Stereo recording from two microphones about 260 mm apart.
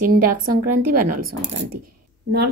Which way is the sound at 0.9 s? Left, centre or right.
Right.